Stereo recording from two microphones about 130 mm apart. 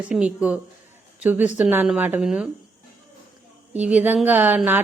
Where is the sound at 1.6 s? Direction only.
15° right (ahead or behind).